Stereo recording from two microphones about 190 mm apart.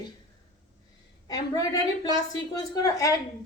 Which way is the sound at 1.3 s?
20° left (ahead or behind).